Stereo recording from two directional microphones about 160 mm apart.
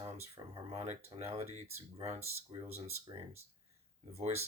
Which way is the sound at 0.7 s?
40° right (ahead or behind).